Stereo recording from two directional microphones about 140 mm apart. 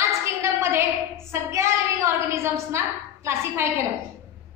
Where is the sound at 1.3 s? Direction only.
20° right (ahead or behind).